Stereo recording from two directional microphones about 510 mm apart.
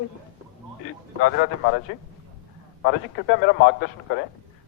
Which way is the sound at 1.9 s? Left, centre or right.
Centre.